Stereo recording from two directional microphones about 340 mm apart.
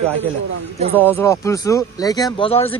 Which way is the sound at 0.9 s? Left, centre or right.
Centre.